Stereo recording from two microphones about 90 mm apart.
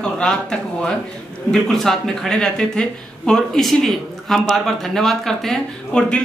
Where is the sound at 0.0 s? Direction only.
10° left (ahead or behind).